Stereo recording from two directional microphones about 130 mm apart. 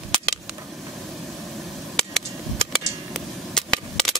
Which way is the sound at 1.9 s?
5° left (ahead or behind).